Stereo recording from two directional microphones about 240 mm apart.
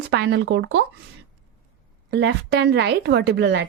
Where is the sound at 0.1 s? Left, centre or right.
Right.